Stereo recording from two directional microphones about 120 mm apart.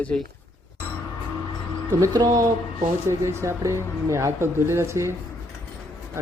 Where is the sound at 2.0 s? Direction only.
30° right (ahead or behind).